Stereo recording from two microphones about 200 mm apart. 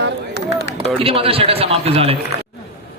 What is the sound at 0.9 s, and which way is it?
A man's voice, 30° right (ahead or behind).